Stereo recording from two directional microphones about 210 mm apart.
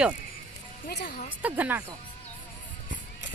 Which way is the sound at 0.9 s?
45° left (ahead or behind).